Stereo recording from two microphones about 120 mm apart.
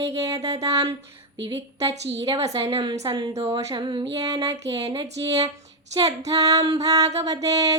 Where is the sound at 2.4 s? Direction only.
55° right (ahead or behind).